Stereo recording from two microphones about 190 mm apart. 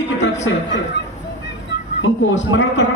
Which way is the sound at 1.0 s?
70° left (ahead or behind).